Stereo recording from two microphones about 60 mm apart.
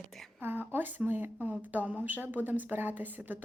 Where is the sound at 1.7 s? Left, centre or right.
Right.